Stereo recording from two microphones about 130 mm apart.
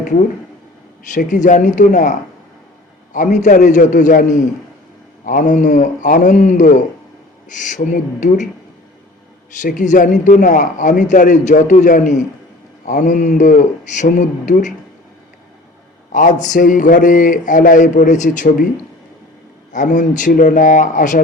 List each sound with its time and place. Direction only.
1.1 s a man's voice: 70° left (ahead or behind)
5.2 s a man's voice: 90° left; by 8.4 s 70° left (ahead or behind)
9.6 s a man's voice: 75° left (ahead or behind)
16.1 s a man's voice: 75° left (ahead or behind)
19.7 s a man's voice: 75° left (ahead or behind)